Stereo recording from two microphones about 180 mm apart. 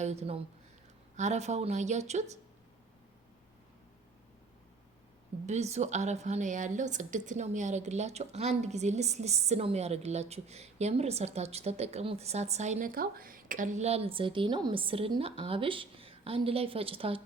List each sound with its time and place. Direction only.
0.0 s a woman's voice: 35° right (ahead or behind)
5.5 s a woman's voice: 40° right (ahead or behind)